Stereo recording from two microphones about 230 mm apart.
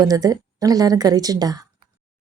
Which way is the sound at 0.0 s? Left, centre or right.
Centre.